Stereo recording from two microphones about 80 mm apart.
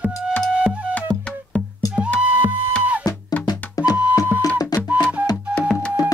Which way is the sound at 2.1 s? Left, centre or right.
Centre.